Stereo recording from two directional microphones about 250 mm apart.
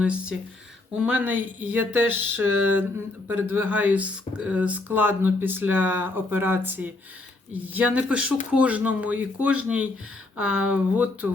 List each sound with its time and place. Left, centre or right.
0.0 s speech: centre